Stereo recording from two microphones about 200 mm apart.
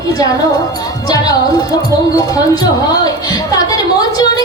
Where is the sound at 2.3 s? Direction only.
20° left (ahead or behind).